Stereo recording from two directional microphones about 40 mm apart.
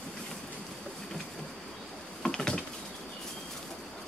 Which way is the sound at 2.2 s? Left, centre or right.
Centre.